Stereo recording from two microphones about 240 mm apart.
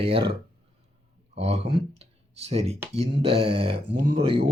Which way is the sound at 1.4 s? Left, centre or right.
Right.